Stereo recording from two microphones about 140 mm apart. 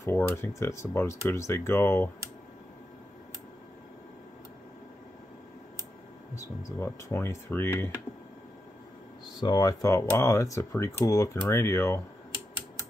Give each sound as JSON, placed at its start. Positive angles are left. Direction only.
{"t": 0.0, "sound": "speech", "side_deg": 15}
{"t": 6.3, "sound": "speech", "side_deg": 20}
{"t": 9.4, "sound": "speech", "side_deg": 30}